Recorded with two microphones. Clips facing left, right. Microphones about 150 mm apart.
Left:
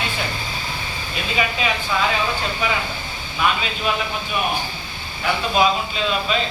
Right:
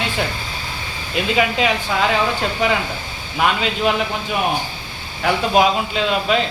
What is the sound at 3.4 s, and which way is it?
Speech, 75° right (ahead or behind).